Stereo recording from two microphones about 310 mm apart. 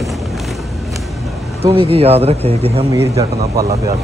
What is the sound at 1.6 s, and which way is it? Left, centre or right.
Speech, centre.